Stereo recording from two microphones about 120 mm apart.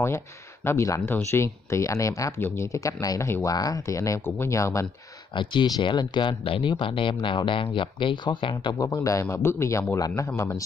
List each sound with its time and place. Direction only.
0.7 s speech: 25° left (ahead or behind)
5.3 s speech: 40° left (ahead or behind)
8.7 s speech: 30° left (ahead or behind)